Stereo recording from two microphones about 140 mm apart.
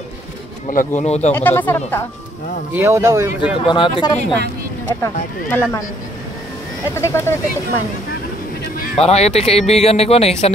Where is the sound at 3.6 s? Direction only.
35° left (ahead or behind).